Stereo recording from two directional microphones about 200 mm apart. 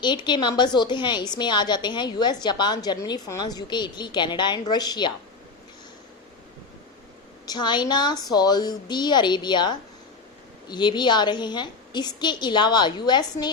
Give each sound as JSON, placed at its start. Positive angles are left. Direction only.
{"t": 0.0, "sound": "a woman's voice", "side_deg": 20}
{"t": 7.4, "sound": "a woman's voice", "side_deg": 20}